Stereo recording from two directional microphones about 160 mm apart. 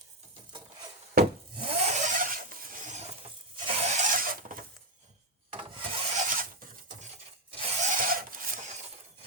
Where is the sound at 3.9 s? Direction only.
50° right (ahead or behind).